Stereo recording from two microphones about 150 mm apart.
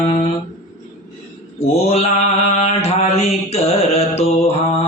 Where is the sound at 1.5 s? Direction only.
45° left (ahead or behind).